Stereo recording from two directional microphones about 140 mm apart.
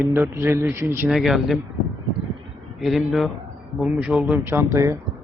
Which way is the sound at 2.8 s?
Centre (ahead or behind).